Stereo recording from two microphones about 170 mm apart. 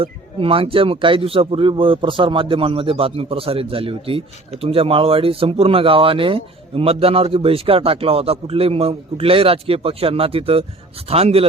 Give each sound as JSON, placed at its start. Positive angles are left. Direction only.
{"t": 0.0, "sound": "speech", "side_deg": -35}